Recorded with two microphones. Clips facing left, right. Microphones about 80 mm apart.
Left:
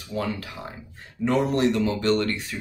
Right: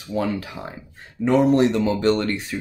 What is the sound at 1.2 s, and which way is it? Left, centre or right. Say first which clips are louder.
Speech: right 5 dB; centre.